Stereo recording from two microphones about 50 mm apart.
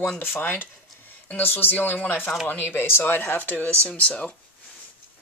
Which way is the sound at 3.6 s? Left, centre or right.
Centre.